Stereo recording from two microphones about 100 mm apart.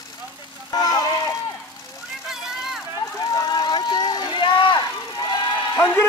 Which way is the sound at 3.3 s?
35° left (ahead or behind).